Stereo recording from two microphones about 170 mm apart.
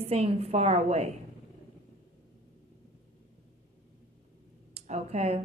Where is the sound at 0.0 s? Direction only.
35° right (ahead or behind).